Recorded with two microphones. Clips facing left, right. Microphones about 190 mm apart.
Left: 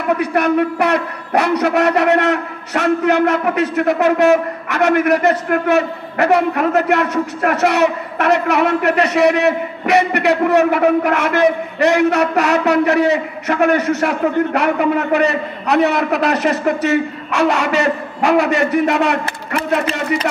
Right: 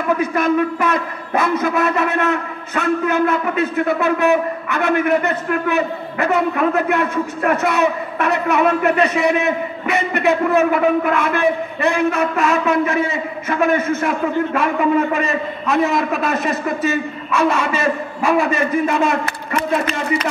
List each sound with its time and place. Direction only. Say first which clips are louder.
0.2 s a man's voice: left 2 dB; 70° left (ahead or behind)